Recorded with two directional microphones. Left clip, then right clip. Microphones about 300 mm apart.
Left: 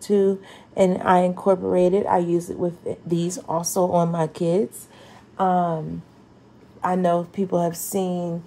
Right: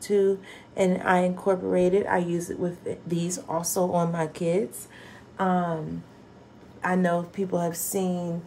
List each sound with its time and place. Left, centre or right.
0.0 s speech: centre
6.8 s speech: centre